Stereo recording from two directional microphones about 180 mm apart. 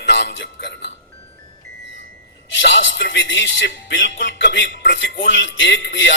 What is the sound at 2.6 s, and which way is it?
Speech, 85° left.